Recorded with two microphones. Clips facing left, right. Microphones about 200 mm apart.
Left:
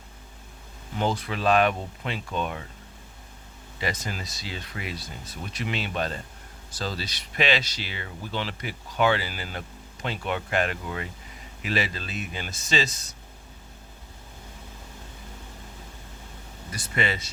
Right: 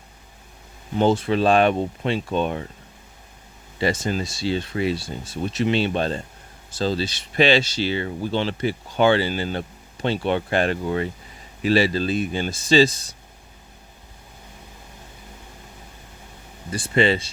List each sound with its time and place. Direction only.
0.9 s speech: 25° right (ahead or behind)
3.8 s speech: 30° right (ahead or behind)
16.7 s speech: 30° right (ahead or behind)